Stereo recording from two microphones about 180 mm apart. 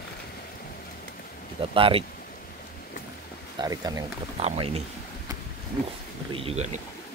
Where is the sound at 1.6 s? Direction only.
30° right (ahead or behind).